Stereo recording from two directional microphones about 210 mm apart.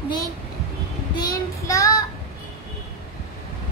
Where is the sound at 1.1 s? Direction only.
20° left (ahead or behind).